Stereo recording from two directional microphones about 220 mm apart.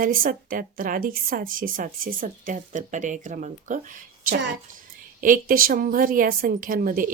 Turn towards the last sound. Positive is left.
turn(degrees=-40)  # may be behind; listen again after turning